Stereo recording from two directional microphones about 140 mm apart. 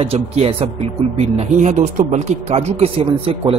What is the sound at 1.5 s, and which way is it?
A man's voice, 55° right (ahead or behind).